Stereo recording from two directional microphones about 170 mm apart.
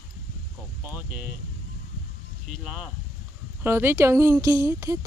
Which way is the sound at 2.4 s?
5° right (ahead or behind).